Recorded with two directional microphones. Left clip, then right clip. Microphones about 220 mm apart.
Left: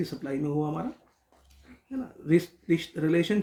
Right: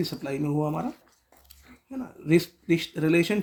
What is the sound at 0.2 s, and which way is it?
Speech, 35° right (ahead or behind).